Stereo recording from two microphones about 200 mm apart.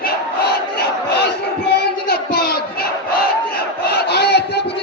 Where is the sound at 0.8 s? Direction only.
55° left (ahead or behind).